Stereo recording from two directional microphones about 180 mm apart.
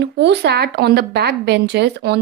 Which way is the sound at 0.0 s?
70° right (ahead or behind).